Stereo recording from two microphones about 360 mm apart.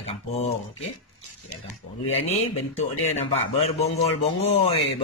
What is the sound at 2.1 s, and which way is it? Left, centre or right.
Speech, centre.